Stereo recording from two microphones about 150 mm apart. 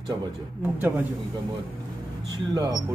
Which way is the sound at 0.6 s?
15° right (ahead or behind).